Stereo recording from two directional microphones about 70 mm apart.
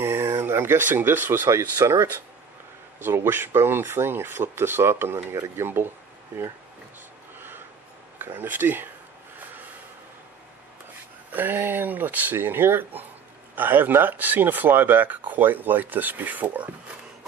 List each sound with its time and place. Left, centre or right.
0.0 s speech: right
3.0 s speech: right
7.3 s gasp: right
8.2 s speech: right
11.3 s speech: right